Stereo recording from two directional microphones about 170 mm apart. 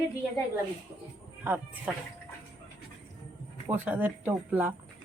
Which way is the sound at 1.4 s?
10° right (ahead or behind).